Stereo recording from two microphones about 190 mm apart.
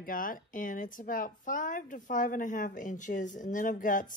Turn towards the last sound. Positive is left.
turn(degrees=45)  # may be behind; listen again after turning